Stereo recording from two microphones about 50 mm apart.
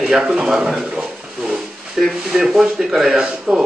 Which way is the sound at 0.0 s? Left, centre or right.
Centre.